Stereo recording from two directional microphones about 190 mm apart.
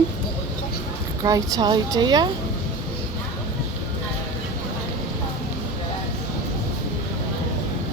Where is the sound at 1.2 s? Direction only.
20° right (ahead or behind).